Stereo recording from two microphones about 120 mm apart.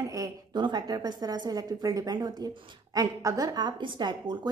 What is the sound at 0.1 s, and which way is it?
A woman's voice, 30° right (ahead or behind).